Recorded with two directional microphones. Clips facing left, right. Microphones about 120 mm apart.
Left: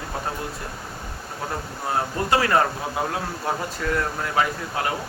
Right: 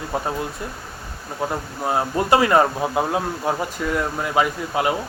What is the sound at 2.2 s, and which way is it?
Speech, 20° right (ahead or behind).